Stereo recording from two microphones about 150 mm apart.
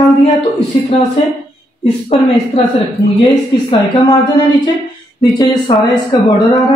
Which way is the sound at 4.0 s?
30° left (ahead or behind).